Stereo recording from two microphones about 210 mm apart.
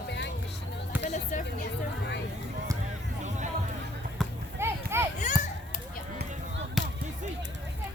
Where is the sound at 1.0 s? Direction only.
35° left (ahead or behind).